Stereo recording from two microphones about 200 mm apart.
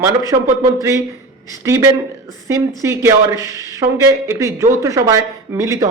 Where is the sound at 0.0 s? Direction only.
15° right (ahead or behind).